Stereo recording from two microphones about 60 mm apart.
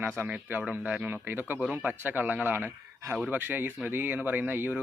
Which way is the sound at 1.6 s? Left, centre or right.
Right.